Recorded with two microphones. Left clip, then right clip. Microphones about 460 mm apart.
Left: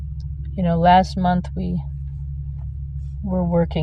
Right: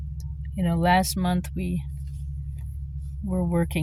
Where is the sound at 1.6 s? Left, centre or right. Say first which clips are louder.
Left 3 dB; right.